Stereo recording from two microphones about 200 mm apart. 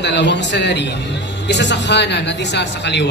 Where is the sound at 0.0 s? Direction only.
60° left (ahead or behind).